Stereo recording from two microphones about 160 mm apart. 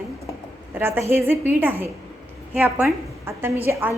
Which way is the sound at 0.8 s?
15° right (ahead or behind).